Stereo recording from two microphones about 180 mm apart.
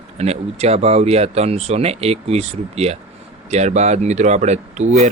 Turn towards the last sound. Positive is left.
turn(degrees=-40)  # may be behind; listen again after turning